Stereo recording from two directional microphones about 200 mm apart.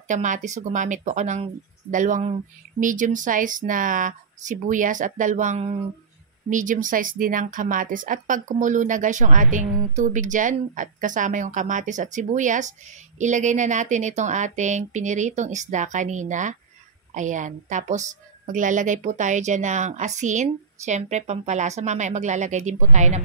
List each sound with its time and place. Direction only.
0.1 s speech: 40° right (ahead or behind)